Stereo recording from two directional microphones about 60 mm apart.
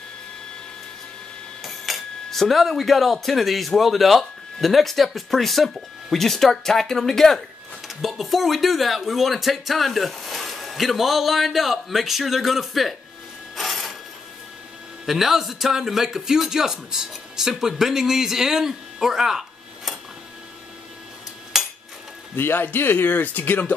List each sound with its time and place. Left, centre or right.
1.6 s speech: centre
13.6 s filing: centre
15.0 s speech: centre
22.3 s speech: left